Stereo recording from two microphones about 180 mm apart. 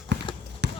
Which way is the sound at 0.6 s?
70° right (ahead or behind).